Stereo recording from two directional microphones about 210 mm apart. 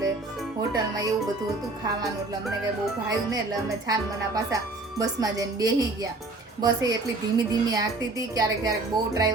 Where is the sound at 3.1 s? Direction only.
20° right (ahead or behind).